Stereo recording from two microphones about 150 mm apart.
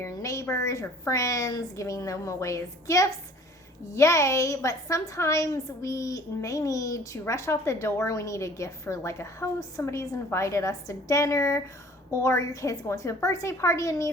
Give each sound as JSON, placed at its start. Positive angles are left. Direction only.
{"t": 0.0, "sound": "a woman's voice", "side_deg": 20}